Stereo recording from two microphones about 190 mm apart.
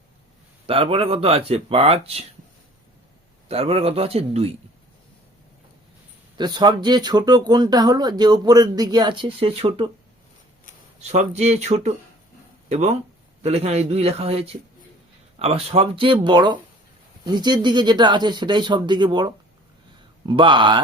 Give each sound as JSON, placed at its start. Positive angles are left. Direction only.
{"t": 0.7, "sound": "speech", "side_deg": -30}
{"t": 3.5, "sound": "speech", "side_deg": -30}
{"t": 6.3, "sound": "speech", "side_deg": -25}
{"t": 11.0, "sound": "speech", "side_deg": -35}